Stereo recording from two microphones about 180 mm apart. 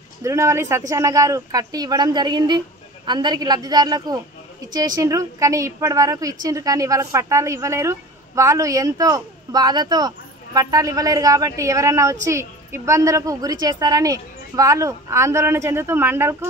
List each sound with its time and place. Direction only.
0.2 s a woman's voice: 15° right (ahead or behind)